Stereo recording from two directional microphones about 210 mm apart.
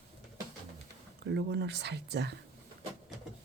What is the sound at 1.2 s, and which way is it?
Speech, 55° right (ahead or behind).